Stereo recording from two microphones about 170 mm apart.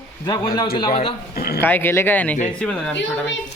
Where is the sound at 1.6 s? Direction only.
10° left (ahead or behind).